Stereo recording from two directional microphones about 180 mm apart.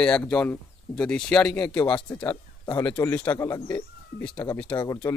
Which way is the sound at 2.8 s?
10° left (ahead or behind).